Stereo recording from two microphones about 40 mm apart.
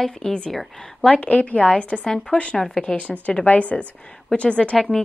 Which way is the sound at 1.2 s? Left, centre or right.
Left.